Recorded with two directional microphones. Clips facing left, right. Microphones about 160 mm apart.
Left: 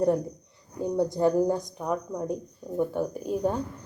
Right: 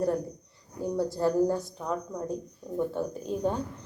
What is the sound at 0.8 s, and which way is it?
Speech, 20° left (ahead or behind).